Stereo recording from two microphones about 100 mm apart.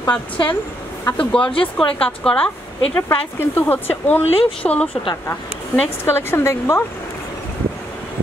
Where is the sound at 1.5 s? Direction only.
60° left (ahead or behind).